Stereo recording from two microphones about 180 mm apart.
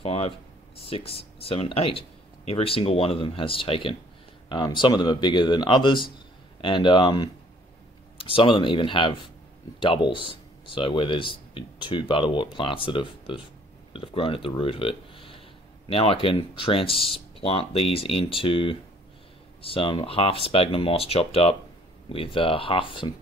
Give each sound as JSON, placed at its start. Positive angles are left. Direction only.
{"t": 0.0, "sound": "speech", "side_deg": 30}